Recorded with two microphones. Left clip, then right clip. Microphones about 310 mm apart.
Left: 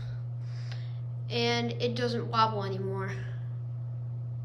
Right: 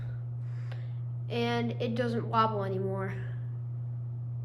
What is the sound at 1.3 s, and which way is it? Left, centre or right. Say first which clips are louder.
A woman's voice: left 2 dB; centre.